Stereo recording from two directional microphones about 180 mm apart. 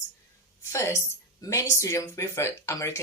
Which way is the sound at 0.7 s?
15° left (ahead or behind).